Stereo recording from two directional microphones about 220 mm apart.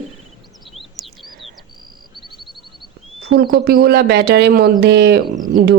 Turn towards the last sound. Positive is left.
turn(degrees=-50)  # may be behind; listen again after turning